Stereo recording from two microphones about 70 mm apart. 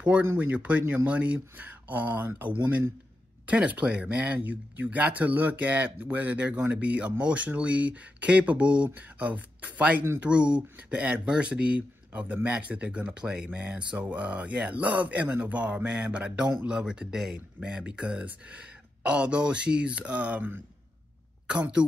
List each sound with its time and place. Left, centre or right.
0.0 s speech: right
21.5 s speech: centre